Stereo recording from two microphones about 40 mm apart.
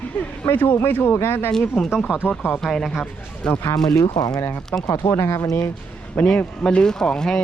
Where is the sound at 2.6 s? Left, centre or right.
Centre.